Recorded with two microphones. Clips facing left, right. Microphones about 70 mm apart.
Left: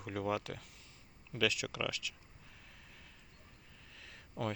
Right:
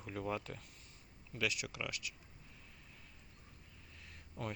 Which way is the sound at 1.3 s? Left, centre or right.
Left.